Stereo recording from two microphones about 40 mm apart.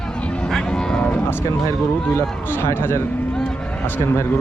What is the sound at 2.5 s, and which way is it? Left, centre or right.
Speech, left.